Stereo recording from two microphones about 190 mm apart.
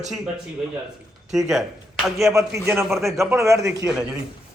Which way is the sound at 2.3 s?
15° right (ahead or behind).